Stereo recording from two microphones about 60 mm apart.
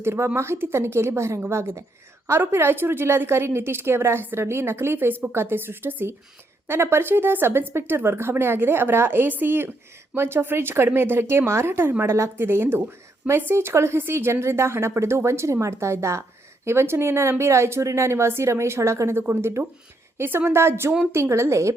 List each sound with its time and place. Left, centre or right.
0.0 s a woman's voice: right
16.6 s a woman's voice: right